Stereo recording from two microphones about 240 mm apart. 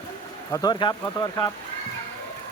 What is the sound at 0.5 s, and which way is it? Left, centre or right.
Speech, centre.